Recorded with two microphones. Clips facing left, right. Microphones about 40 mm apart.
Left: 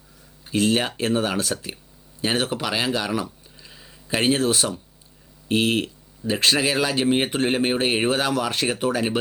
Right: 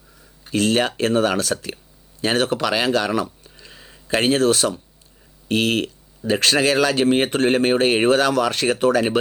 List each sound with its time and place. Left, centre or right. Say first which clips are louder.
0.5 s speech: right 2 dB; right
3.7 s a sound: right 2 dB; right
4.2 s speech: right 3 dB; right